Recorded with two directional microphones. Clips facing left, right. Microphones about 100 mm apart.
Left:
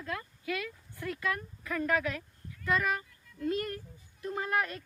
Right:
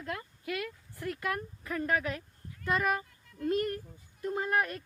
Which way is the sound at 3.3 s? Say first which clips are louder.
Right 2 dB; 40° right (ahead or behind).